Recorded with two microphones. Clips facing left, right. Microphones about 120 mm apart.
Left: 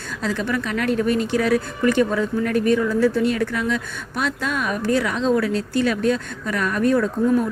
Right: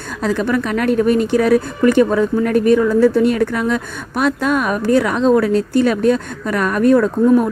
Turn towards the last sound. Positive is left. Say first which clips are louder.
# right 6 dB
turn(degrees=-55)  # may be behind; listen again after turning